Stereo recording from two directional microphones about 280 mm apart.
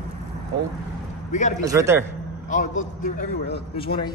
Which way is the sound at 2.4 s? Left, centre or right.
Left.